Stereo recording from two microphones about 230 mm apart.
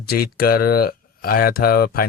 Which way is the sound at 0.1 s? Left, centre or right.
Left.